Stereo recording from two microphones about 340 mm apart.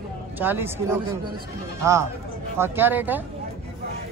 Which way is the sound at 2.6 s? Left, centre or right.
Centre.